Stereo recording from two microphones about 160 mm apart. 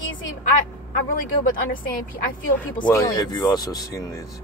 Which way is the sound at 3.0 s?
25° left (ahead or behind).